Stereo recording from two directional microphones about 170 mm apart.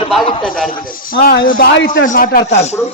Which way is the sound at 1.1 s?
65° left (ahead or behind).